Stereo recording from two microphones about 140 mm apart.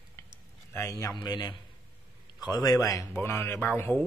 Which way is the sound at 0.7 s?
20° left (ahead or behind).